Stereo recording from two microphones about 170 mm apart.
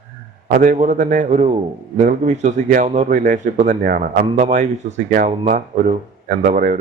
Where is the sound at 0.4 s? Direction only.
55° right (ahead or behind).